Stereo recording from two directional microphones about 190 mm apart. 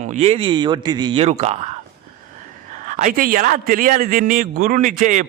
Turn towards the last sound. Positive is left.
turn(degrees=-45)  # may be behind; listen again after turning